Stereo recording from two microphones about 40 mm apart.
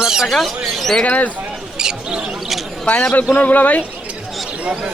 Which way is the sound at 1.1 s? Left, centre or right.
Left.